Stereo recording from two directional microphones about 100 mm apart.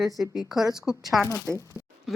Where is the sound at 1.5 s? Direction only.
30° left (ahead or behind).